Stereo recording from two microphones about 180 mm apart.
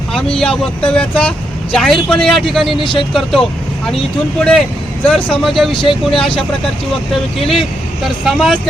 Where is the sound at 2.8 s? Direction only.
30° left (ahead or behind).